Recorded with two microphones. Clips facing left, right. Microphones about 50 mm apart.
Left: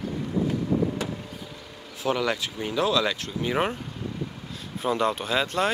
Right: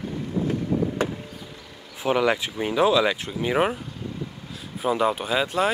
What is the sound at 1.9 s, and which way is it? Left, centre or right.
Speech, right.